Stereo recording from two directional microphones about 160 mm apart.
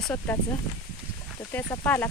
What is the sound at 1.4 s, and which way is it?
Speech, 20° left (ahead or behind).